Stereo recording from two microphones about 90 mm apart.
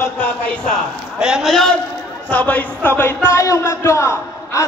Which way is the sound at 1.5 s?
5° left (ahead or behind).